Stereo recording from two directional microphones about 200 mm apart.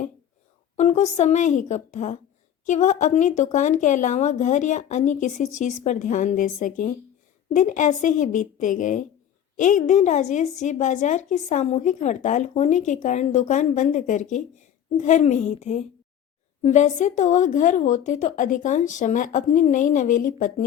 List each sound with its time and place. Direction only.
0.8 s a woman's voice: 35° left (ahead or behind)